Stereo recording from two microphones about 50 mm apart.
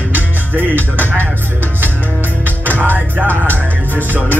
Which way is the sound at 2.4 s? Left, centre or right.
Left.